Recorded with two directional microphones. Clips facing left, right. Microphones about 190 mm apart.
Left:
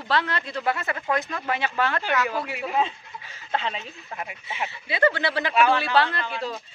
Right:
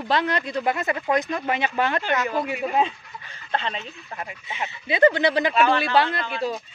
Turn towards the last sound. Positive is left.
turn(degrees=-15)  # may be behind; listen again after turning